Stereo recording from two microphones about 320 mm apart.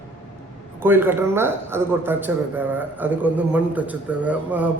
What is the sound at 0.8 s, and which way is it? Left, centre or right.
A man's voice, centre.